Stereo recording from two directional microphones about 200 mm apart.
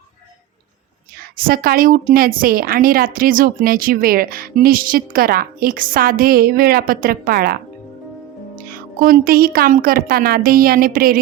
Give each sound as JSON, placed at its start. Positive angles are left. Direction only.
{"t": 1.5, "sound": "a woman's voice", "side_deg": -45}
{"t": 8.7, "sound": "a woman's voice", "side_deg": -45}